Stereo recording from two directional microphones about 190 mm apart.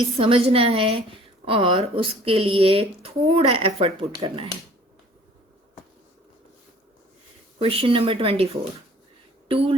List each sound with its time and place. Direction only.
0.2 s speech: 30° right (ahead or behind)
7.6 s speech: 30° right (ahead or behind)